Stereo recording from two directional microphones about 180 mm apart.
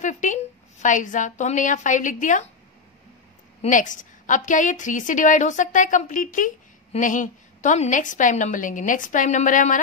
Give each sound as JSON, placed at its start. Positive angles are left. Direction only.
{"t": 0.0, "sound": "a woman's voice", "side_deg": 45}
{"t": 3.6, "sound": "a woman's voice", "side_deg": 45}